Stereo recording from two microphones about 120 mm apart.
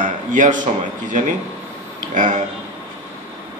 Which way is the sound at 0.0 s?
90° right.